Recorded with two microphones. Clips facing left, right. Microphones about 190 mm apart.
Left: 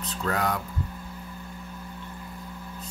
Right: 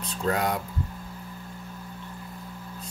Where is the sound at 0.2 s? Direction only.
25° right (ahead or behind).